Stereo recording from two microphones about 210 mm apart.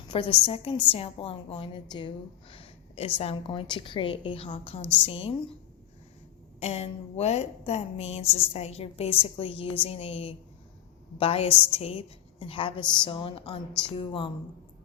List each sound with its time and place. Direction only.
0.1 s a woman's voice: 25° left (ahead or behind)
4.8 s a woman's voice: 10° left (ahead or behind)
5.0 s a woman's voice: 25° left (ahead or behind)
6.6 s a woman's voice: 30° left (ahead or behind)